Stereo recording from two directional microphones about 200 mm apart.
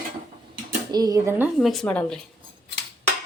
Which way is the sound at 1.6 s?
Centre (ahead or behind).